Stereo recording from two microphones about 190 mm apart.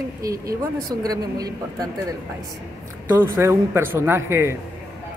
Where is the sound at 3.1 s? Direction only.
10° right (ahead or behind).